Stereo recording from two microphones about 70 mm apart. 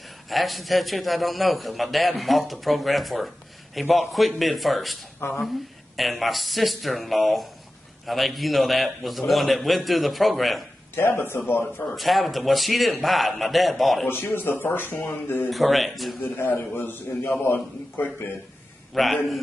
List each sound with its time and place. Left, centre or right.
0.3 s a man's voice: centre
11.0 s a man's voice: left
11.9 s a man's voice: centre
14.0 s speech: left
15.5 s a man's voice: centre
16.2 s a man's voice: left
18.9 s a man's voice: centre